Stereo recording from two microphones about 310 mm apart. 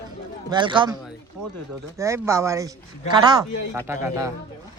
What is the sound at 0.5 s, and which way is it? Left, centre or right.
Speech, centre.